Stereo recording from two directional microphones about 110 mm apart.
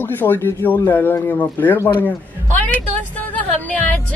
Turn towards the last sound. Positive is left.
turn(degrees=10)  # may be behind; listen again after turning